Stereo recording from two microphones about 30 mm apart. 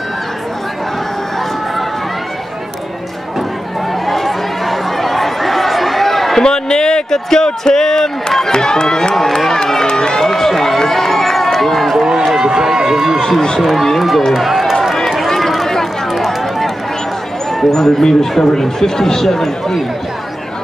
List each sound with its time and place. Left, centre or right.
4.0 s chatter: centre
6.4 s a sound: left
8.5 s speech: left
9.1 s run: centre
10.2 s run: centre
12.4 s run: right
13.6 s speech: centre
14.3 s run: centre
17.6 s speech: centre